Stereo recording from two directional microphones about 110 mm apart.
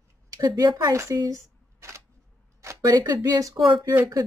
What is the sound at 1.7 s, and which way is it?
Camera, 25° right (ahead or behind).